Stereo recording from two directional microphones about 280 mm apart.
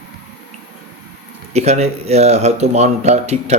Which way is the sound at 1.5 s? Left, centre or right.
Right.